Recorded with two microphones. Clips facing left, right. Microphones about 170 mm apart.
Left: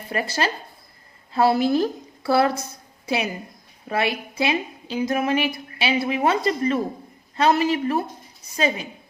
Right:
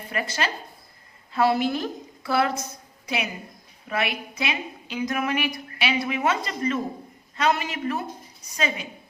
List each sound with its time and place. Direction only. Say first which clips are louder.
0.1 s a woman's voice: left 4 dB; 35° left (ahead or behind)
3.8 s a woman's voice: left 4 dB; 30° left (ahead or behind)